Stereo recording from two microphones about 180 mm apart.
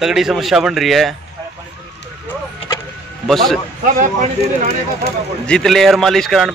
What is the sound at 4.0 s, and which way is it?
Speech, 50° right (ahead or behind).